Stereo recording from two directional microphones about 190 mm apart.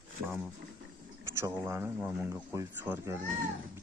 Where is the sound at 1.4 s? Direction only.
15° right (ahead or behind).